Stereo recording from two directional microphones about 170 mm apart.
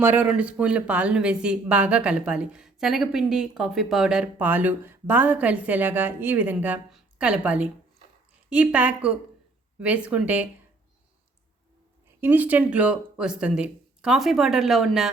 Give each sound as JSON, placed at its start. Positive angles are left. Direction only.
{"t": 0.0, "sound": "speech", "side_deg": -10}
{"t": 12.2, "sound": "speech", "side_deg": -10}